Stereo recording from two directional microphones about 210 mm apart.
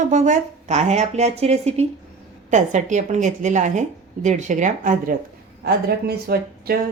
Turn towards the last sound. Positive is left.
turn(degrees=-50)  # may be behind; listen again after turning